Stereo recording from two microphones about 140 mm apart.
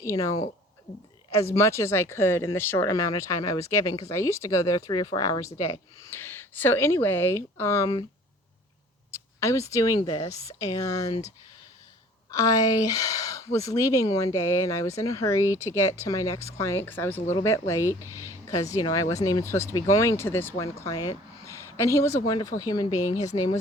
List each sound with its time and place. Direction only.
0.0 s speech: 25° left (ahead or behind)
1.4 s speech: 20° left (ahead or behind)
6.1 s speech: 15° left (ahead or behind)
9.1 s speech: 20° left (ahead or behind)
12.3 s speech: 25° left (ahead or behind)
18.1 s speech: 20° right (ahead or behind)
18.4 s speech: 25° left (ahead or behind)
20.8 s speech: 25° left (ahead or behind)